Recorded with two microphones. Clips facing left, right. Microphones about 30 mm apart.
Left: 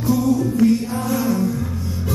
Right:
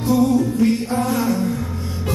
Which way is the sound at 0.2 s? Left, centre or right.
Right.